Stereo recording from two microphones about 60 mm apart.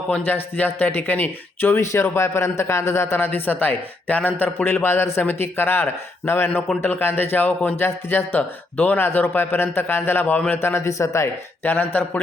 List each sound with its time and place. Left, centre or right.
0.3 s a man's voice: left
1.8 s a man's voice: left
11.6 s a man's voice: left